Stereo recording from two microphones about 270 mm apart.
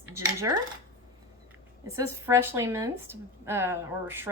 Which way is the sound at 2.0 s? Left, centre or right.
Centre.